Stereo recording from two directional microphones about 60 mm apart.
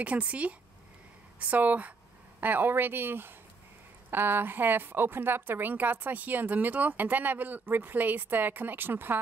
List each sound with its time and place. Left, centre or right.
0.0 s a woman's voice: right